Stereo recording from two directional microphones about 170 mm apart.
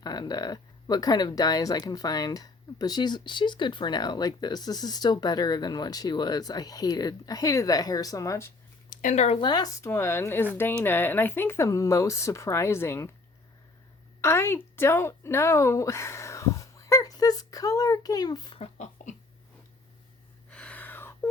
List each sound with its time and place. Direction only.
0.0 s speech: 25° left (ahead or behind)
8.9 s speech: 50° left (ahead or behind)
9.5 s speech: 20° left (ahead or behind)
14.2 s speech: 15° left (ahead or behind); by 19.1 s 40° left (ahead or behind)
20.5 s a sound: 5° left (ahead or behind)